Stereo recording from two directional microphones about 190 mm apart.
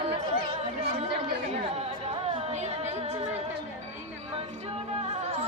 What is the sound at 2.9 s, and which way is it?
Music, 30° right (ahead or behind).